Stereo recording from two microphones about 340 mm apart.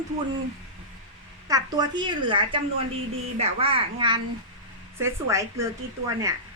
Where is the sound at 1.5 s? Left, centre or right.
Centre.